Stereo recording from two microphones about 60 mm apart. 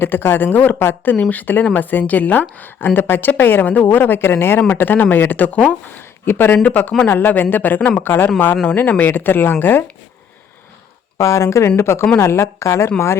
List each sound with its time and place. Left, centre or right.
0.0 s a woman's voice: left
6.0 s speech: left
6.6 s a woman's voice: left
11.2 s speech: left